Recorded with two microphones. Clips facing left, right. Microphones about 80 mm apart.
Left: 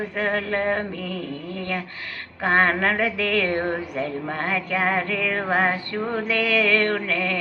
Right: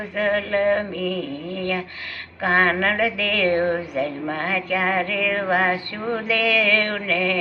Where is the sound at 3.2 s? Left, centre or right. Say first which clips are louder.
Right 2 dB; left.